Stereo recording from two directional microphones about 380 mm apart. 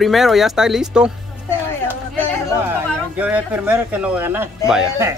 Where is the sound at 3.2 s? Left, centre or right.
Centre.